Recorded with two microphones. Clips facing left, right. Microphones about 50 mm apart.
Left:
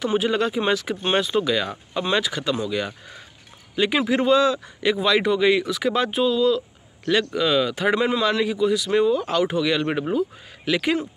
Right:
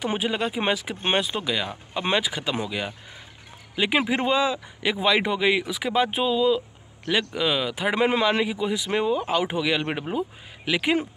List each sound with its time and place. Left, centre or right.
0.0 s a man's voice: centre
8.2 s a man's voice: right